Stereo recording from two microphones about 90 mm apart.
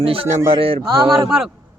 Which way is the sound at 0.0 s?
90° right.